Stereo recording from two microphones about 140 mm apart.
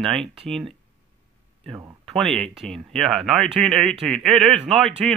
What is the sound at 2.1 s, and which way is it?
Speech, centre (ahead or behind).